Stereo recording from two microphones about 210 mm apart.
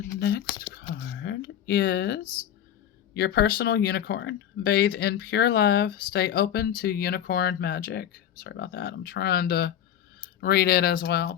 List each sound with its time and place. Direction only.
0.2 s speech: 50° left (ahead or behind)
1.2 s a sound: 55° left (ahead or behind)
3.2 s speech: 50° left (ahead or behind)